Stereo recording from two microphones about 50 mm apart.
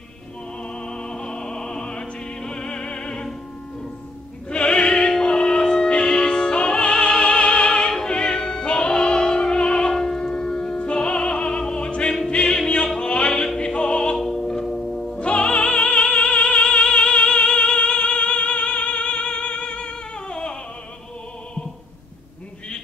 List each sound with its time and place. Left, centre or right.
0.8 s opera: centre
4.5 s music: centre
14.1 s music: centre
15.1 s music: left